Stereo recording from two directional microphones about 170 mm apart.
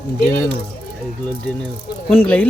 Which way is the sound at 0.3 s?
10° left (ahead or behind).